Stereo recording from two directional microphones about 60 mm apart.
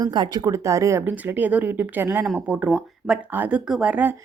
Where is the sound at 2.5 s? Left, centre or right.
Right.